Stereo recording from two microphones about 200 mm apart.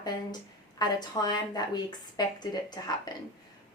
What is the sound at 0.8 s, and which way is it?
A woman's voice, 20° left (ahead or behind).